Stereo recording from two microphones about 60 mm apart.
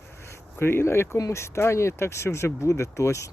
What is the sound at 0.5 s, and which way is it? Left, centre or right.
Speech, left.